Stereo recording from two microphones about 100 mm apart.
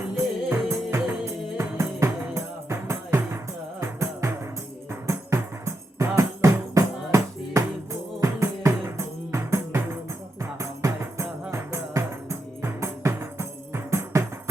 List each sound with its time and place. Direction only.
0.5 s music: 25° right (ahead or behind)